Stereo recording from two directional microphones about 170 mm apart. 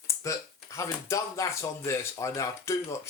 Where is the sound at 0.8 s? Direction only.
20° left (ahead or behind).